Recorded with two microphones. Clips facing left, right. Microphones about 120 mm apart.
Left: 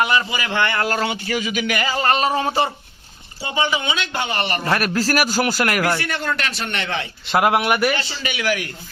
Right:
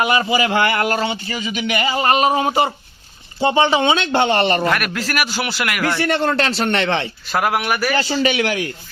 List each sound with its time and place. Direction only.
0.0 s speech: 25° right (ahead or behind)
0.9 s a man's voice: centre (ahead or behind)
1.9 s speech: 10° right (ahead or behind); by 4.6 s 30° right (ahead or behind)
4.7 s a man's voice: 35° left (ahead or behind)
6.0 s speech: 30° right (ahead or behind)
7.3 s speech: 25° left (ahead or behind)
7.9 s speech: 30° right (ahead or behind)